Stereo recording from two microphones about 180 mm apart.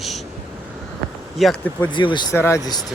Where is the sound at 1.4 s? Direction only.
Centre (ahead or behind).